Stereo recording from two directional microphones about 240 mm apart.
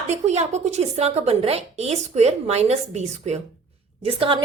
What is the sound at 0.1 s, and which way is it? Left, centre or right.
A woman's voice, right.